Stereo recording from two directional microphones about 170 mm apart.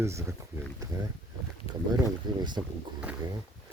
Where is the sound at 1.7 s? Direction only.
35° left (ahead or behind).